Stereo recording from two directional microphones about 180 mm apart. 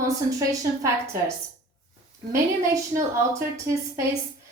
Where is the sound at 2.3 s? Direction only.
15° right (ahead or behind).